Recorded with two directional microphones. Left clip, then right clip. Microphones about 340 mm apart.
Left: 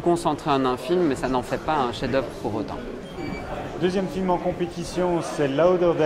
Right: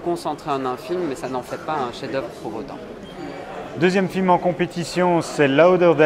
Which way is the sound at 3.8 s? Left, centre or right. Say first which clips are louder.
Right 6 dB; right.